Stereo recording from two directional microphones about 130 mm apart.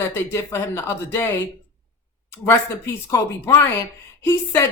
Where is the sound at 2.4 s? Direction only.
20° left (ahead or behind).